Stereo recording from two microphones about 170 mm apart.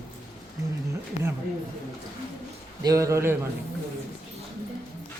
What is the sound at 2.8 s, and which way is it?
Speech, 20° right (ahead or behind).